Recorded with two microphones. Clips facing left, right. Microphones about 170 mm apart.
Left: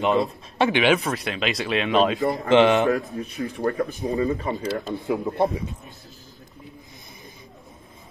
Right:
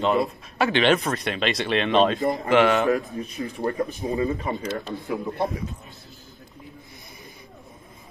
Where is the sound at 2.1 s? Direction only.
20° right (ahead or behind).